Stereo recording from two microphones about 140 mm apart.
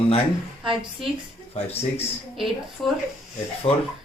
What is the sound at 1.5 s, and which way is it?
Speech, 45° left (ahead or behind).